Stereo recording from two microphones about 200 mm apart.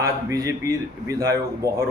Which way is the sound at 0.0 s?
15° right (ahead or behind).